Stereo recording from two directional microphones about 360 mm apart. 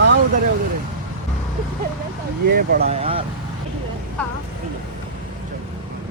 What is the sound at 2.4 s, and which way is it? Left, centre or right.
Speech, right.